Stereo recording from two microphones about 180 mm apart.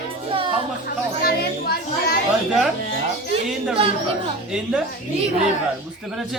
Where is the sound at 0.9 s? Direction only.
60° left (ahead or behind).